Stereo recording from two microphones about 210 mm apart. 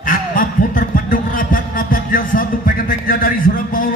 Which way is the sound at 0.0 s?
40° left (ahead or behind).